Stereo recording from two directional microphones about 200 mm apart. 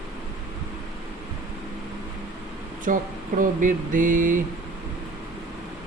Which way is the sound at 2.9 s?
40° right (ahead or behind).